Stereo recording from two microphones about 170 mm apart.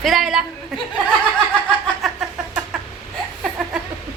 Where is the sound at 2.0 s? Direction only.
5° right (ahead or behind).